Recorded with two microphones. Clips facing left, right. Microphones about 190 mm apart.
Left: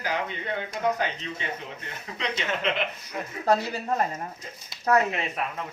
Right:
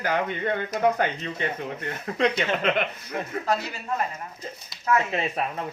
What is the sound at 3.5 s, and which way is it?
Speech, 35° left (ahead or behind).